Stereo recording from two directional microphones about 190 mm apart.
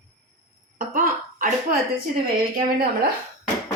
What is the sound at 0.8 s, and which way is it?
Cough, 45° right (ahead or behind).